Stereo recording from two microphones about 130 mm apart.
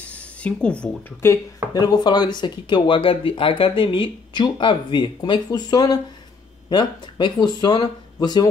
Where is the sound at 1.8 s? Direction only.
30° left (ahead or behind).